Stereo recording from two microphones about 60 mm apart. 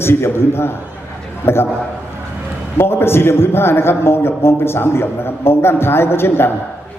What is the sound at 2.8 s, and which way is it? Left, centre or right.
A man's voice, left.